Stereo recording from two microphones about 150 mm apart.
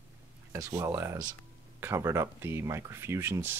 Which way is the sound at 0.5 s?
20° right (ahead or behind).